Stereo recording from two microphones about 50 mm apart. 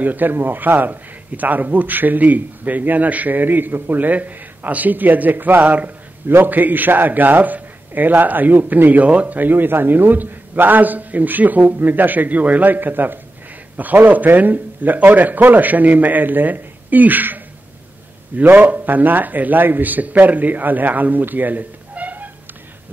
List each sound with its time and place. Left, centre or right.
0.0 s a man's voice: right
6.2 s a man's voice: right
9.4 s a man's voice: right